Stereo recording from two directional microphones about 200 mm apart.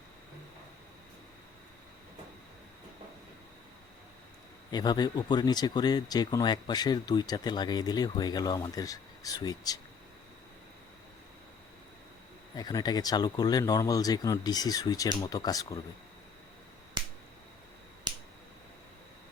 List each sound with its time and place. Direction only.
4.7 s speech: 20° left (ahead or behind)
12.5 s speech: 20° left (ahead or behind)
17.0 s finger snapping: 20° right (ahead or behind)